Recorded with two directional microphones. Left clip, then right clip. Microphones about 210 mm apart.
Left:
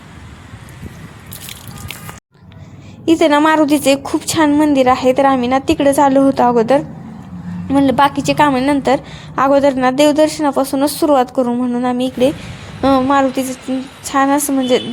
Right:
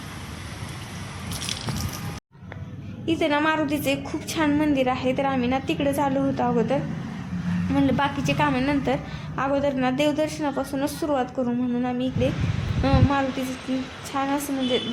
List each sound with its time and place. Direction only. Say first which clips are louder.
3.1 s a woman's voice: left 11 dB; 40° left (ahead or behind)